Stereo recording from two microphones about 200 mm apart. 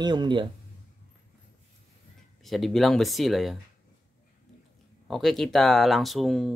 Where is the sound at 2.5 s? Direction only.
Centre (ahead or behind).